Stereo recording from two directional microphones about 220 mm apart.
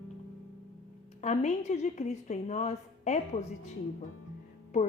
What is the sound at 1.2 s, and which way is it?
A woman's voice, 30° left (ahead or behind).